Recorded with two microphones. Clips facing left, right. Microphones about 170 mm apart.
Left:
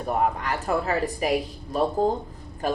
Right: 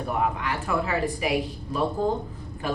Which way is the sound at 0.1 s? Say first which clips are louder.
Left 3 dB; 40° left (ahead or behind).